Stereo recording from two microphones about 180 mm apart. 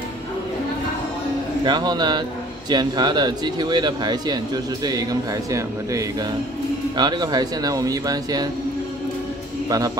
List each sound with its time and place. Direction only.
1.6 s speech: 25° right (ahead or behind)
9.7 s speech: 20° right (ahead or behind)